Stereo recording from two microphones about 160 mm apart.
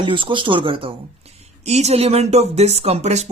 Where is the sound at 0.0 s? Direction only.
30° right (ahead or behind).